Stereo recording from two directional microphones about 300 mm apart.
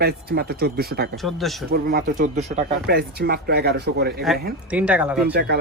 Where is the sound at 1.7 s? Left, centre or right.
Right.